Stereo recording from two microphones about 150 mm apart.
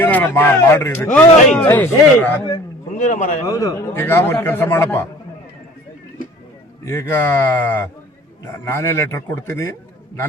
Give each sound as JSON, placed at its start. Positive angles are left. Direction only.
{"t": 0.0, "sound": "speech", "side_deg": 10}
{"t": 3.0, "sound": "a man's voice", "side_deg": 55}
{"t": 3.4, "sound": "speech", "side_deg": 20}
{"t": 6.8, "sound": "speech", "side_deg": 20}